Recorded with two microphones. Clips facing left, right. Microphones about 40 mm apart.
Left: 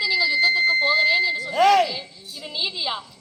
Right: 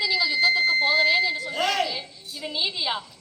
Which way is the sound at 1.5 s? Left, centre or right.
Left.